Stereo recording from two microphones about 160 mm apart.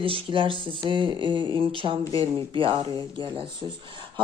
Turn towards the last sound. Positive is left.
turn(degrees=-30)  # may be behind; listen again after turning